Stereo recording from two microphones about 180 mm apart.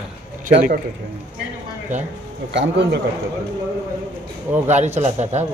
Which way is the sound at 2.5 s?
75° right (ahead or behind).